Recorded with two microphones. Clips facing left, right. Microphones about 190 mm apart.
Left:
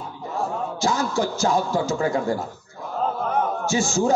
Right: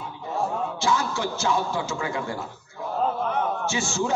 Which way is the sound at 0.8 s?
40° left (ahead or behind).